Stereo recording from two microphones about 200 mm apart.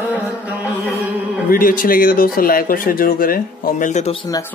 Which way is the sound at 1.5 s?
45° left (ahead or behind).